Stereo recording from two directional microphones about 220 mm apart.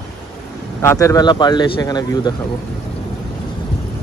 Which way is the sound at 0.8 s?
15° left (ahead or behind).